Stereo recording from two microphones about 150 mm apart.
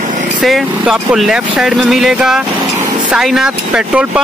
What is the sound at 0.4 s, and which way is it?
Speech, centre (ahead or behind).